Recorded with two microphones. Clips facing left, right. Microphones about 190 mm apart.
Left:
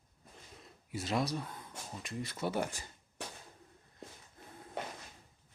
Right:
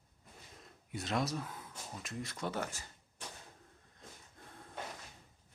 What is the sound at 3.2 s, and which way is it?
Firecracker, 70° left (ahead or behind).